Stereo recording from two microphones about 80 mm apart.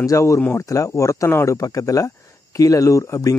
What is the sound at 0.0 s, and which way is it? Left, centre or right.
Speech, left.